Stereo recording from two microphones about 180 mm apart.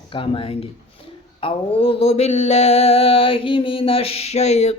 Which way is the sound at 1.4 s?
30° left (ahead or behind).